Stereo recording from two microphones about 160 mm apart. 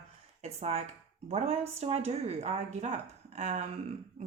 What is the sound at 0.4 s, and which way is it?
A woman's voice, 40° right (ahead or behind).